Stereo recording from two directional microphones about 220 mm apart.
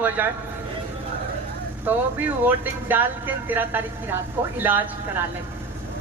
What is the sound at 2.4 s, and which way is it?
A woman's voice, 10° right (ahead or behind).